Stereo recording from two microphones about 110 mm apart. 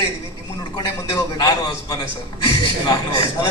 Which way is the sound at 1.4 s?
40° left (ahead or behind).